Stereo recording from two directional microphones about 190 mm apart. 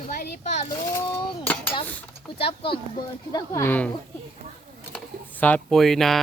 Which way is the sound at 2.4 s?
30° left (ahead or behind).